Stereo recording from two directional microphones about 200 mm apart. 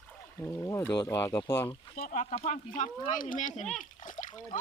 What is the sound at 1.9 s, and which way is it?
Speech, 40° left (ahead or behind).